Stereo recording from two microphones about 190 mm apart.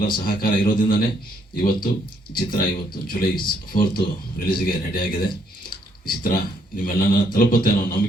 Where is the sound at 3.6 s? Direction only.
50° left (ahead or behind).